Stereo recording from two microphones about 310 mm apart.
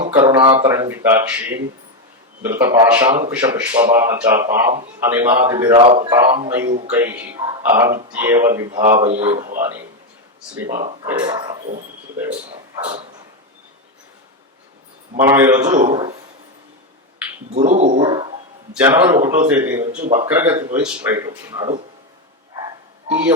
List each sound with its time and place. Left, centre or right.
0.1 s speech: centre
6.7 s speech: right
6.9 s speech: centre
9.3 s speech: right
10.7 s speech: right
11.0 s speech: centre
12.8 s speech: centre
15.2 s speech: centre
17.5 s speech: right
18.7 s speech: centre
23.0 s a man's voice: centre